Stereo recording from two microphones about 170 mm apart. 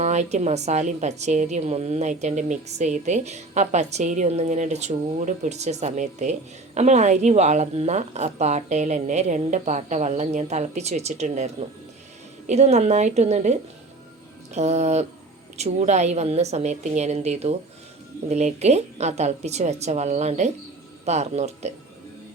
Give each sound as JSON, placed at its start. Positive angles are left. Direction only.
{"t": 0.0, "sound": "a woman's voice", "side_deg": -45}